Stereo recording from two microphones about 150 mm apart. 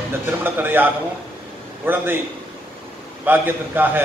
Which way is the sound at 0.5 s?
15° right (ahead or behind).